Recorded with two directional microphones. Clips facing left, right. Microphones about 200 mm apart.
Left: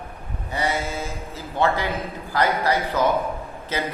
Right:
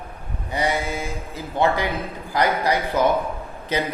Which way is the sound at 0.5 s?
15° right (ahead or behind).